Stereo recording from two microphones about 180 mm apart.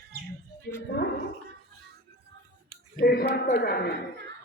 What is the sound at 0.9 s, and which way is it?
Speech, 60° left (ahead or behind).